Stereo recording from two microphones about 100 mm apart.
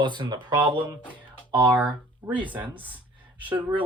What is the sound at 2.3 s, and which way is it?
Speech, 55° right (ahead or behind).